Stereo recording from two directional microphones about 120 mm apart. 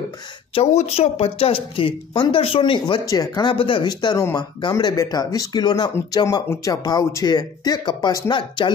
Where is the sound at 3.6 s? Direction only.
45° left (ahead or behind).